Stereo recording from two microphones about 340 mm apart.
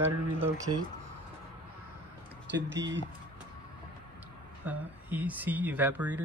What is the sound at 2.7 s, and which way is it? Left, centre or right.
Speech, right.